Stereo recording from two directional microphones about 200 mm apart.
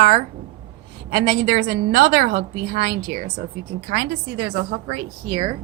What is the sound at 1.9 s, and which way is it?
Speech, 55° right (ahead or behind).